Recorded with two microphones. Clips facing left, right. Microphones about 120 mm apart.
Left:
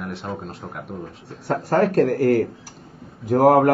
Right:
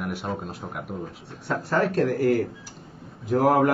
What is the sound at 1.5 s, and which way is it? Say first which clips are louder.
Speech: left 5 dB; 45° left (ahead or behind).